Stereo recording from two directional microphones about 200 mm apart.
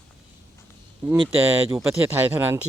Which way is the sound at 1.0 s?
20° right (ahead or behind).